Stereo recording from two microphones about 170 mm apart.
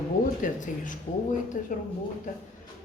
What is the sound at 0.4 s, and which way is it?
Speech, 50° left (ahead or behind).